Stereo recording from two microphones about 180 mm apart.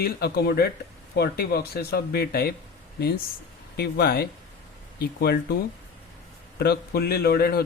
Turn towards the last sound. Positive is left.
turn(degrees=60)  # may be behind; listen again after turning